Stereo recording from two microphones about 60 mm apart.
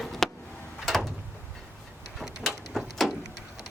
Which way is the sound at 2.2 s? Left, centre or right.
Centre.